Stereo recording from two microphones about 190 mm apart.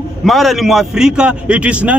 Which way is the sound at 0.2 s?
Centre (ahead or behind).